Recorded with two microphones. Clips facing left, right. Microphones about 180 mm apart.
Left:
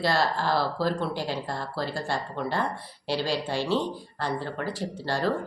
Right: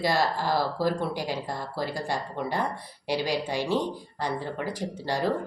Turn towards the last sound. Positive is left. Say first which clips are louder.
# even
turn(degrees=-15)  # may be behind; listen again after turning